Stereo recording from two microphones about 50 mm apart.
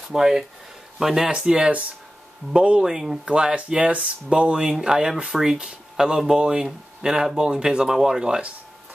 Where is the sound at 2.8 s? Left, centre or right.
Centre.